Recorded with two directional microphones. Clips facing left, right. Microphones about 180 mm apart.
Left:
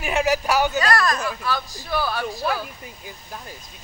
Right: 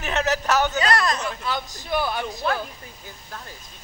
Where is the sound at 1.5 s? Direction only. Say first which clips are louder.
Left 1 dB; 20° right (ahead or behind).